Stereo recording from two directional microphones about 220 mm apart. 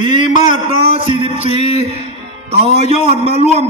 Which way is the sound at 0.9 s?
25° right (ahead or behind).